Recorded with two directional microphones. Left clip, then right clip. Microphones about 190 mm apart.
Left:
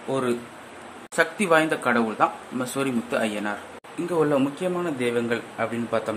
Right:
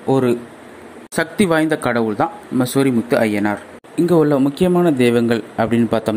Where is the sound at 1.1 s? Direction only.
35° right (ahead or behind).